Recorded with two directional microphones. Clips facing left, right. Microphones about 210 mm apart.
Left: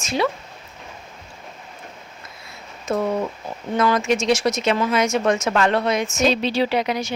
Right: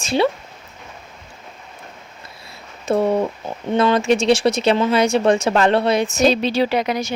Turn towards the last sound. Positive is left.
turn(degrees=-45)  # may be behind; listen again after turning